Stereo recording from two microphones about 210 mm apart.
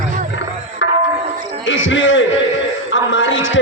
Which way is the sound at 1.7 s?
65° left (ahead or behind).